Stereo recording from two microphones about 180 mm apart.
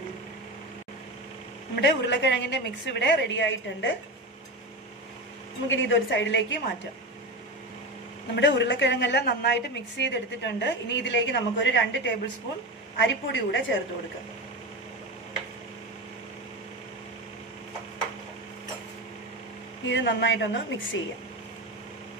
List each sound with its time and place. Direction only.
1.8 s a woman's voice: 75° left (ahead or behind)
5.7 s a woman's voice: 90° left
8.4 s a woman's voice: 80° left
19.9 s a woman's voice: 85° left